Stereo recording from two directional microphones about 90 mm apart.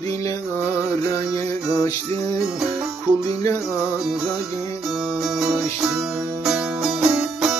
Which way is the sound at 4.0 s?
5° right (ahead or behind).